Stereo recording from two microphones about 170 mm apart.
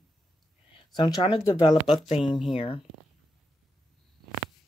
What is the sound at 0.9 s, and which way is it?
Speech, 35° left (ahead or behind).